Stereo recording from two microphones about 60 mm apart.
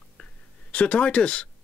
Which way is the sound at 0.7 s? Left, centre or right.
Left.